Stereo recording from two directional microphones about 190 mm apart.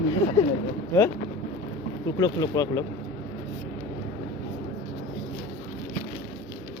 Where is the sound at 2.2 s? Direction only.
20° left (ahead or behind).